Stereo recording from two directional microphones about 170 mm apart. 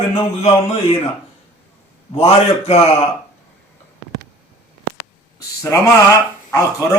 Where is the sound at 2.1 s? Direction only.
35° left (ahead or behind).